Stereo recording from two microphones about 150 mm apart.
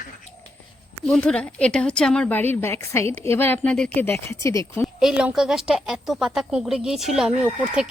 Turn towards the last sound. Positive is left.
turn(degrees=-5)  # may be behind; listen again after turning